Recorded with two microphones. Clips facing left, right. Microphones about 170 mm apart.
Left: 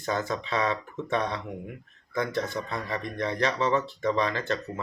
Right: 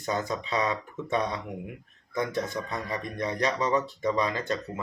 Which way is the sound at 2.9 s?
15° right (ahead or behind).